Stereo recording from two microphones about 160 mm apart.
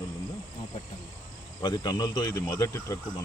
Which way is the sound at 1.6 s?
30° left (ahead or behind).